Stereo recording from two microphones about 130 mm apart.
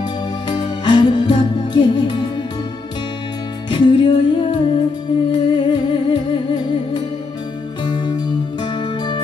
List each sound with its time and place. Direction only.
0.5 s music: 35° left (ahead or behind)
3.7 s music: 40° left (ahead or behind)